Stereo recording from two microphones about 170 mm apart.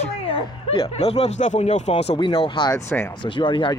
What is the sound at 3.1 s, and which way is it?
Speech, 30° left (ahead or behind).